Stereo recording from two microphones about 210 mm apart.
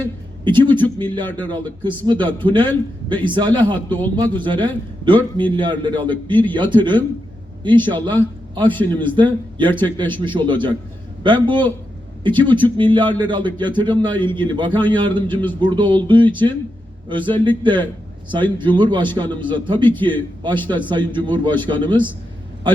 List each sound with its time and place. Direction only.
0.4 s a man's voice: 20° right (ahead or behind)